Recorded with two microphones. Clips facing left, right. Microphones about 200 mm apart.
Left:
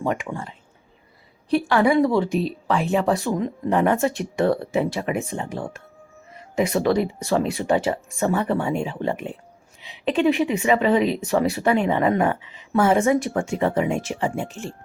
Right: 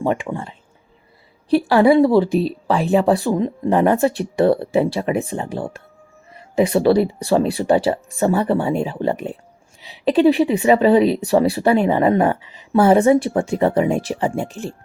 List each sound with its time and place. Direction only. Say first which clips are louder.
0.0 s speech: right 4 dB; 30° right (ahead or behind)